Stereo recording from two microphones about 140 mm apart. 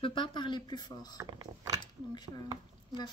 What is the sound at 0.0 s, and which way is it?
Speech, 35° left (ahead or behind).